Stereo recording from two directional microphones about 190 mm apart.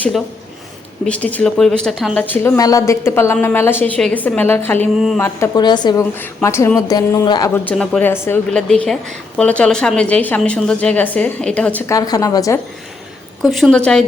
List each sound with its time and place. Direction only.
1.0 s a woman's voice: 5° left (ahead or behind)
13.4 s a woman's voice: centre (ahead or behind)